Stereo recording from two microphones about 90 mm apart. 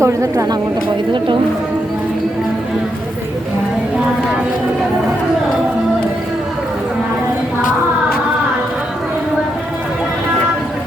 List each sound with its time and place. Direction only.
0.0 s a woman's voice: 35° right (ahead or behind)